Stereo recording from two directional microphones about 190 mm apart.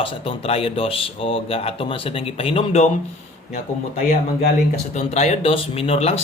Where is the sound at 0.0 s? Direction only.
30° left (ahead or behind).